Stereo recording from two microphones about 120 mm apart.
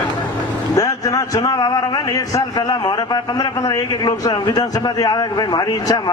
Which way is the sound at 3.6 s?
30° left (ahead or behind).